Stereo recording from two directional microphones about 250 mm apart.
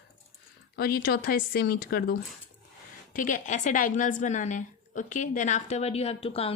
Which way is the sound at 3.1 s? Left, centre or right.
Left.